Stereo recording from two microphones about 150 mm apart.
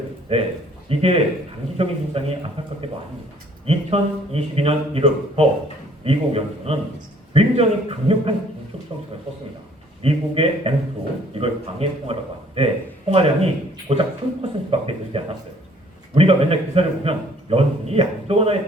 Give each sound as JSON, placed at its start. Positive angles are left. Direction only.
{"t": 0.3, "sound": "speech", "side_deg": -40}
{"t": 10.0, "sound": "speech", "side_deg": -40}